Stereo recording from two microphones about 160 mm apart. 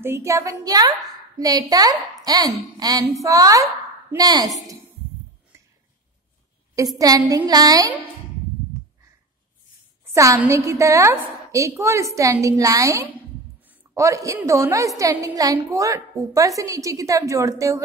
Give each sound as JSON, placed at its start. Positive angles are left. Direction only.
{"t": 0.0, "sound": "a woman's voice", "side_deg": -15}
{"t": 5.5, "sound": "a sound", "side_deg": -15}
{"t": 7.0, "sound": "a woman's voice", "side_deg": -20}
{"t": 10.0, "sound": "a woman's voice", "side_deg": -20}